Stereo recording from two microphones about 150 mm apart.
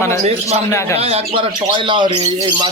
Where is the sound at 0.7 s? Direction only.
20° left (ahead or behind).